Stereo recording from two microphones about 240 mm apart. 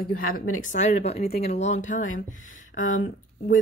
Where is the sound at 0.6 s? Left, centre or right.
Left.